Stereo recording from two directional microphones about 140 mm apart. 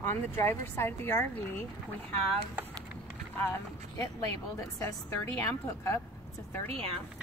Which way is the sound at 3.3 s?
20° left (ahead or behind).